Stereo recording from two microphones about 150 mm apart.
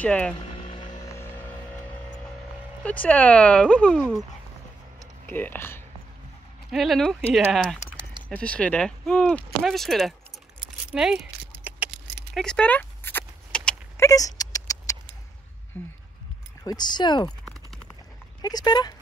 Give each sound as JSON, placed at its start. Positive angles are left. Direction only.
{"t": 0.0, "sound": "speech", "side_deg": 10}
{"t": 0.7, "sound": "vehicle", "side_deg": 35}
{"t": 1.1, "sound": "music", "side_deg": 15}
{"t": 2.8, "sound": "speech", "side_deg": 10}
{"t": 5.2, "sound": "speech", "side_deg": 10}
{"t": 6.7, "sound": "speech", "side_deg": 0}
{"t": 10.9, "sound": "a sound", "side_deg": -5}
{"t": 11.9, "sound": "keys jangling", "side_deg": 5}
{"t": 13.9, "sound": "a sound", "side_deg": 20}
{"t": 16.6, "sound": "speech", "side_deg": 30}
{"t": 17.5, "sound": "a sound", "side_deg": 5}
{"t": 18.4, "sound": "speech", "side_deg": 25}